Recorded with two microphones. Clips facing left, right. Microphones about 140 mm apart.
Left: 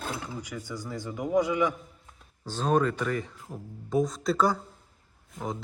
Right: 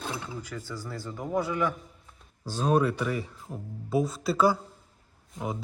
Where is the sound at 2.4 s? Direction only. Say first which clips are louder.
Right 1 dB; 10° right (ahead or behind).